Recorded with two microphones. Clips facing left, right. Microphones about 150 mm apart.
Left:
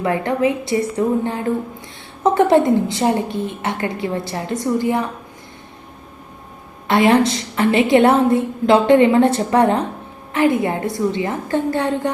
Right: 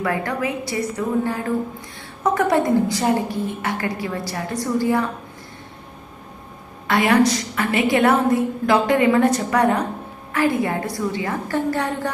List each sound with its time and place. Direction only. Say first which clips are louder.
0.0 s a woman's voice: left 5 dB; 25° left (ahead or behind)
6.8 s a woman's voice: left 3 dB; 25° left (ahead or behind)